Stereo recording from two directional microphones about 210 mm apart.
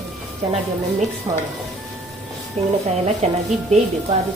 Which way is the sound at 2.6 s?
30° right (ahead or behind).